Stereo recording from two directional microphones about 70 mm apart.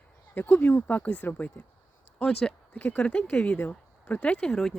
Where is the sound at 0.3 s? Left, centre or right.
Left.